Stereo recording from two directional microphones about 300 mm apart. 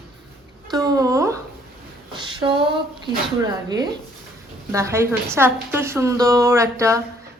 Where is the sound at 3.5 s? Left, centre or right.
Centre.